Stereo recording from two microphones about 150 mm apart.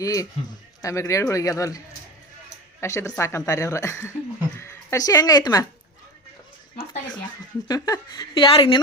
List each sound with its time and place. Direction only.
0.0 s a woman's voice: 25° left (ahead or behind)
2.8 s a woman's voice: 20° left (ahead or behind)
7.7 s a woman's voice: 25° left (ahead or behind)